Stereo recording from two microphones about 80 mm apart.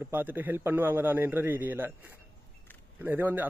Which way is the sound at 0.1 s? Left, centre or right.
Right.